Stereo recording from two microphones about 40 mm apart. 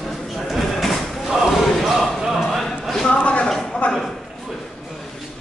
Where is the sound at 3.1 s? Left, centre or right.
Left.